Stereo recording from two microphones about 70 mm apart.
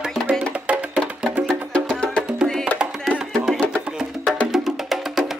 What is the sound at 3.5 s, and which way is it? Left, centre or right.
Music, centre.